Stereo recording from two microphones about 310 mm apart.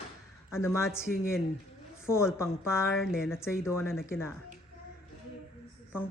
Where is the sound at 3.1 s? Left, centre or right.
Centre.